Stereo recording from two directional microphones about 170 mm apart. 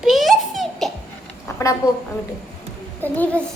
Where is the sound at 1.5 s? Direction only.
15° left (ahead or behind).